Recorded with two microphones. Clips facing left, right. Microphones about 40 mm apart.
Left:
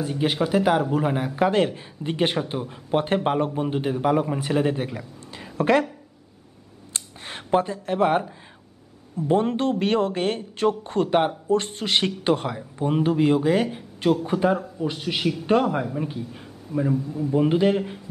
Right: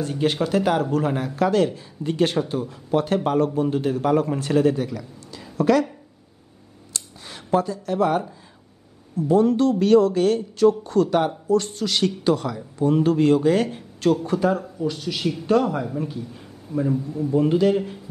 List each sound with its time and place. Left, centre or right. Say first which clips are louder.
0.0 s speech: right 1 dB; centre
4.7 s speech: right 2 dB; left
6.9 s a sound: left 2 dB; left
9.1 s speech: right 3 dB; left
13.1 s speech: even; centre
14.2 s speech: even; centre
17.3 s speech: right 1 dB; left